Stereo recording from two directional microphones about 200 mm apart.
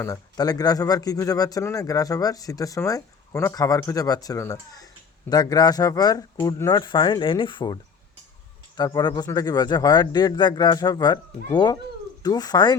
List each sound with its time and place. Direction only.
0.0 s a man's voice: 20° left (ahead or behind)